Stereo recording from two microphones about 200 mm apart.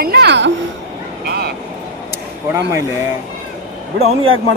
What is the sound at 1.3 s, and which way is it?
Vehicle, 55° right (ahead or behind).